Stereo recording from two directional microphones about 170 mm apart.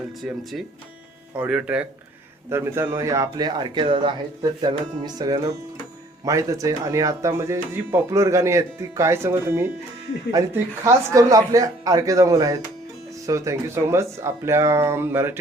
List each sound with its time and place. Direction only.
0.2 s speech: centre (ahead or behind)